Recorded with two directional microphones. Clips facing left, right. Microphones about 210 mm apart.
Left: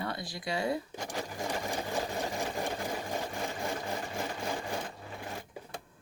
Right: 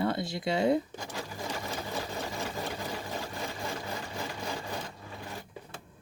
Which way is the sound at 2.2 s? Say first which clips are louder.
Left 2 dB; 15° left (ahead or behind).